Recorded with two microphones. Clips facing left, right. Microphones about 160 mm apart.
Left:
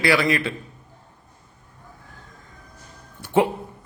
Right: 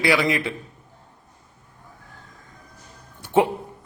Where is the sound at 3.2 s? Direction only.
20° right (ahead or behind).